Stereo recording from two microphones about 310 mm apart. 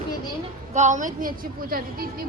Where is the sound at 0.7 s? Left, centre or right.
Right.